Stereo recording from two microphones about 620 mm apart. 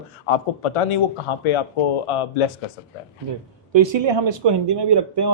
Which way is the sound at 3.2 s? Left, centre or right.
Right.